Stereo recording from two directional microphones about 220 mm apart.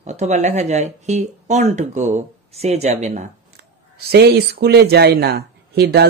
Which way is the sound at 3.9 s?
45° right (ahead or behind).